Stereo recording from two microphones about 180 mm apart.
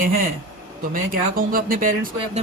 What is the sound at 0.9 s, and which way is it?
Speech, 50° right (ahead or behind).